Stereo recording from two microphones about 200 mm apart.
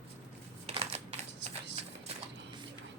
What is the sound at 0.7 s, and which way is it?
Typing, 30° right (ahead or behind).